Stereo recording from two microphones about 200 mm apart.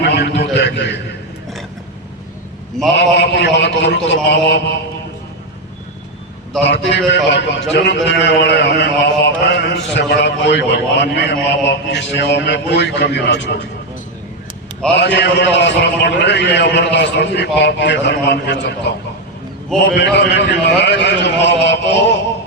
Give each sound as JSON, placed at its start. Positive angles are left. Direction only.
{"t": 0.0, "sound": "a sound", "side_deg": 55}
{"t": 2.9, "sound": "a man's voice", "side_deg": 60}
{"t": 6.7, "sound": "a man's voice", "side_deg": 60}
{"t": 14.9, "sound": "a man's voice", "side_deg": 60}
{"t": 19.7, "sound": "a man's voice", "side_deg": 5}
{"t": 20.1, "sound": "a man's voice", "side_deg": 60}